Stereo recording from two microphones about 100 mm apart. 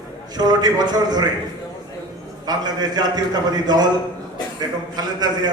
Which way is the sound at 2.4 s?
45° right (ahead or behind).